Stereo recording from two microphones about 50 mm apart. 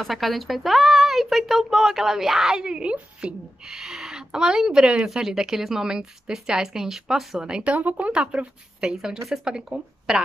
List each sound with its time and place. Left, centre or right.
0.0 s speech: centre; by 3.3 s right
3.6 s speech: centre
7.7 s a woman's voice: right; by 10.2 s centre